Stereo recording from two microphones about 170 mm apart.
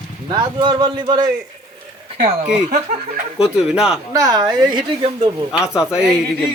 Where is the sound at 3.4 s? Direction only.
5° right (ahead or behind).